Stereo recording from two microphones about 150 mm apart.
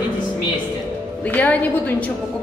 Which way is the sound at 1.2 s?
10° left (ahead or behind).